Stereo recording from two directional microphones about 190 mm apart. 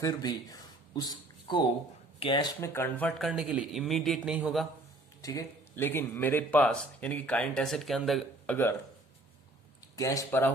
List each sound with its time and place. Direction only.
0.0 s speech: 20° left (ahead or behind)
2.6 s speech: 15° left (ahead or behind); by 4.6 s 5° right (ahead or behind)
5.2 s speech: 15° left (ahead or behind); by 8.5 s centre (ahead or behind)
9.9 s speech: 15° left (ahead or behind)